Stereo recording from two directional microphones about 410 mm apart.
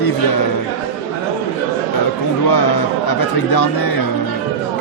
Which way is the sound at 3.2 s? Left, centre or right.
Left.